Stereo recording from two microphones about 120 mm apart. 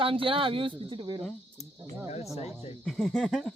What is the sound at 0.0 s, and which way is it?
Speech, 50° right (ahead or behind).